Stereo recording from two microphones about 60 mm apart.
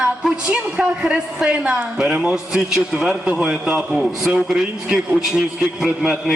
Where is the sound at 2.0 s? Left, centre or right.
Centre.